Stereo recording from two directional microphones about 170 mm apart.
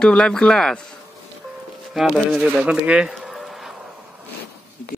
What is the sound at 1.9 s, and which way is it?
Speech, centre (ahead or behind).